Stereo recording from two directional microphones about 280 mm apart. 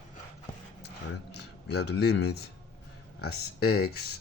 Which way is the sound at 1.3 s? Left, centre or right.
Left.